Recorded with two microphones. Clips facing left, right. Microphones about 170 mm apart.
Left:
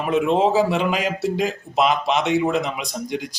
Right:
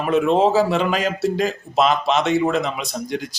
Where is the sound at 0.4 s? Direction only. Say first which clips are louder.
Right 1 dB; 15° left (ahead or behind).